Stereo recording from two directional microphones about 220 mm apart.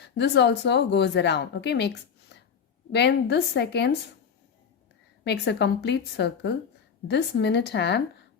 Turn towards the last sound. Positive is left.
turn(degrees=50)  # may be behind; listen again after turning